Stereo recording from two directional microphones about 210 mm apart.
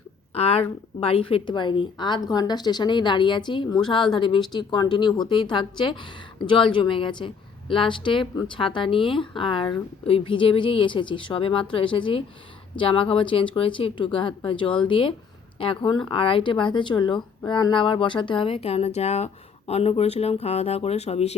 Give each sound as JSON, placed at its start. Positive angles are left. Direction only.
{"t": 0.3, "sound": "speech", "side_deg": 30}